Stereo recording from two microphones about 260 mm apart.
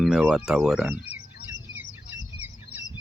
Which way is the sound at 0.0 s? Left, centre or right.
Centre.